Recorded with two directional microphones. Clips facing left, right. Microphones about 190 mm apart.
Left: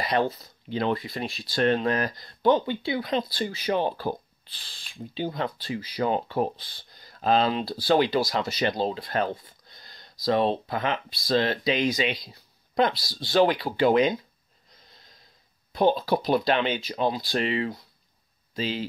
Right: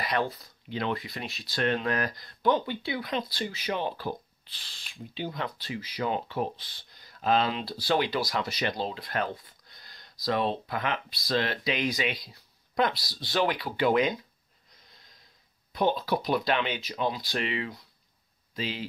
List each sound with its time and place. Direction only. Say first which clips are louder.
0.0 s speech: left 4 dB; 25° left (ahead or behind)
15.7 s speech: left 4 dB; 30° left (ahead or behind)